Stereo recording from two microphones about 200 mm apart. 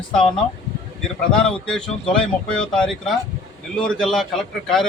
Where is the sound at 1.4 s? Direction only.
5° left (ahead or behind).